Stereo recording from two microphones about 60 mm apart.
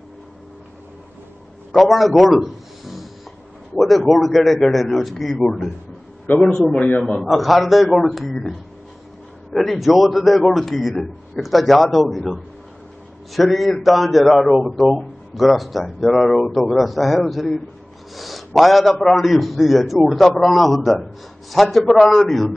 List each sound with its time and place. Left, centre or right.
1.7 s a man's voice: centre
6.3 s a man's voice: left
7.0 s a man's voice: centre